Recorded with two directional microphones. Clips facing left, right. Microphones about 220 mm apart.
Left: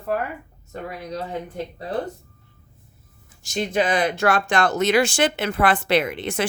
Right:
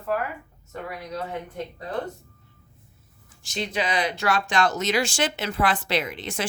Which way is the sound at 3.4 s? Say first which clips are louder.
Left 6 dB; 45° left (ahead or behind).